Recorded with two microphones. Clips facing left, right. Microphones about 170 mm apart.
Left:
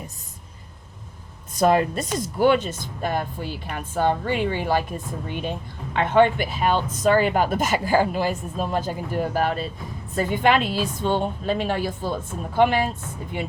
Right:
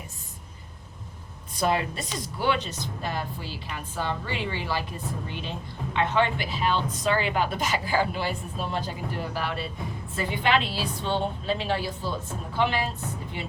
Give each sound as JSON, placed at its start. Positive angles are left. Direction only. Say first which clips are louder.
{"t": 1.5, "sound": "speech", "louder": "left 7 dB", "side_deg": 45}